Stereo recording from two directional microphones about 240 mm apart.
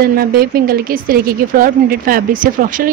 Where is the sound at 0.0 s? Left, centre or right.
Right.